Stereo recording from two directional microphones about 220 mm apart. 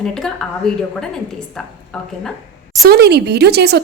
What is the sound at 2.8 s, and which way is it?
Speech, 45° right (ahead or behind).